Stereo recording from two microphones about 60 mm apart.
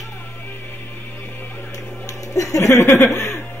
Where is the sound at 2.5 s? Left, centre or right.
Left.